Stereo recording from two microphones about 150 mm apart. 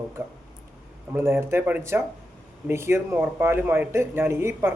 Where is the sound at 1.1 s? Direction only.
15° right (ahead or behind).